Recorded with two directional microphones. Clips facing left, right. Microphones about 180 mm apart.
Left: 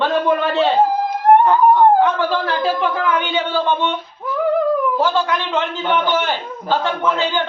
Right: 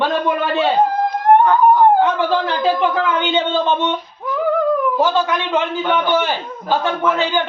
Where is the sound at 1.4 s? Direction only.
5° left (ahead or behind).